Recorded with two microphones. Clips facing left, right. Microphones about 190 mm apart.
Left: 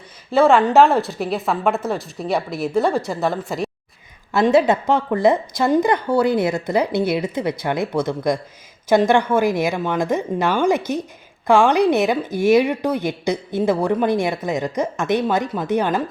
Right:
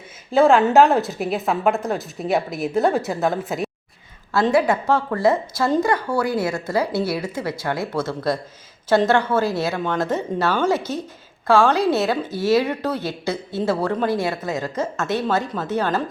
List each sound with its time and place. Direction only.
0.3 s speech: centre (ahead or behind)
4.3 s a woman's voice: 15° left (ahead or behind)